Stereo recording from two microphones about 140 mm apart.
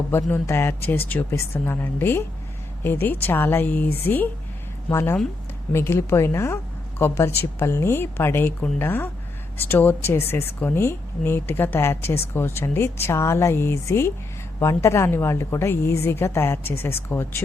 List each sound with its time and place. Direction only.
0.1 s a woman's voice: 15° left (ahead or behind)